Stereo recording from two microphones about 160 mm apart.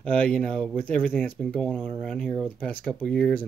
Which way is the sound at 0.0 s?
5° left (ahead or behind).